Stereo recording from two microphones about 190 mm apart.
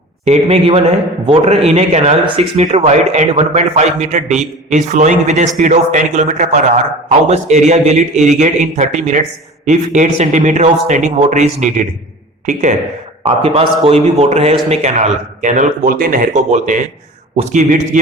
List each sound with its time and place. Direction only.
0.3 s a man's voice: 30° right (ahead or behind)
13.2 s a man's voice: 30° right (ahead or behind)